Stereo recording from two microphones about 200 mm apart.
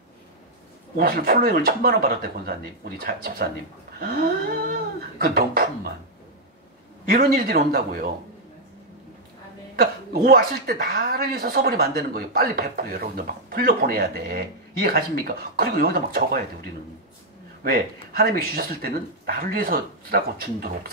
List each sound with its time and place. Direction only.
0.9 s speech: 45° right (ahead or behind)
7.1 s speech: 45° right (ahead or behind)
9.8 s speech: 50° right (ahead or behind)
18.1 s speech: 50° right (ahead or behind)